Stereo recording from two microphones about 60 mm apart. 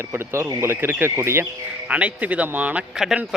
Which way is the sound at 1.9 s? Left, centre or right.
Right.